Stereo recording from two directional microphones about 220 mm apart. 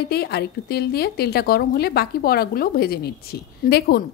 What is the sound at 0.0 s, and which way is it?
A woman's voice, 45° left (ahead or behind).